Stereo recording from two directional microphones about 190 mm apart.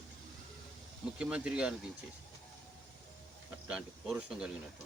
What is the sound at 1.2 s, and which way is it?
Speech, 5° right (ahead or behind).